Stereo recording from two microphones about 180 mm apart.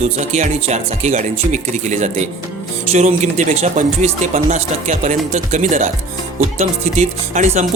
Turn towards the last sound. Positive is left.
turn(degrees=-40)  # may be behind; listen again after turning